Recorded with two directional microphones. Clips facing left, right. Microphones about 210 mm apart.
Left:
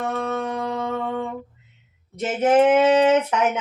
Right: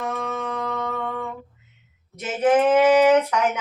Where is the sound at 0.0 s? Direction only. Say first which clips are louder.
Left 3 dB; 35° left (ahead or behind).